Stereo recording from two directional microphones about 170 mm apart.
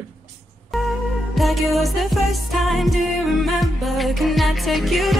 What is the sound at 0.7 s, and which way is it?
Music, centre (ahead or behind).